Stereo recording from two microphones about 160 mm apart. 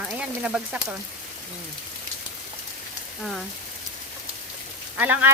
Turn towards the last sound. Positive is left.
turn(degrees=-10)  # may be behind; listen again after turning